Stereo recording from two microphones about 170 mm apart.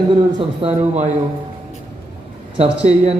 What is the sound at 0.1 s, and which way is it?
Speech, 30° right (ahead or behind).